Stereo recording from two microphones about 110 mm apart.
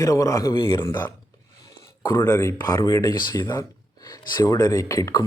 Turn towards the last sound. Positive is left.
turn(degrees=30)  # may be behind; listen again after turning